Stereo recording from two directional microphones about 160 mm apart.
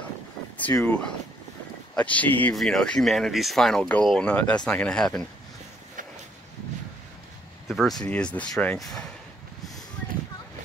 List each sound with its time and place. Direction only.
0.7 s speech: 10° left (ahead or behind)
7.6 s speech: centre (ahead or behind)